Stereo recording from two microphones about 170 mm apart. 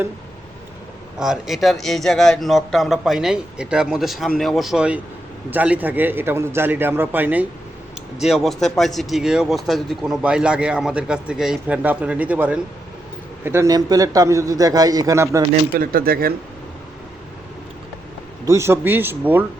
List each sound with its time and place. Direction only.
1.2 s a man's voice: centre (ahead or behind); by 15.4 s 15° right (ahead or behind)
15.8 s speech: 55° right (ahead or behind)
18.4 s a man's voice: 15° right (ahead or behind)